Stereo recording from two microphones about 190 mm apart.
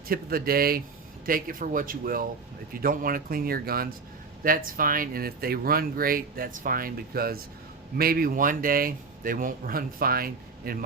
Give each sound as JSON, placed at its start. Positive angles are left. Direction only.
{"t": 0.1, "sound": "speech", "side_deg": -50}